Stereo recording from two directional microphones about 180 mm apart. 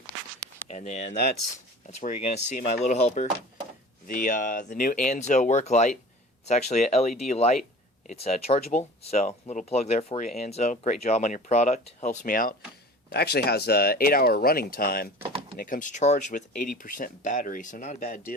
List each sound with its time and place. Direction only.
0.7 s speech: 40° left (ahead or behind)
13.1 s speech: 65° left (ahead or behind)